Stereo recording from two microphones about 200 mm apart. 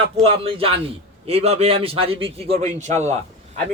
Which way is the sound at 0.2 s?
30° right (ahead or behind).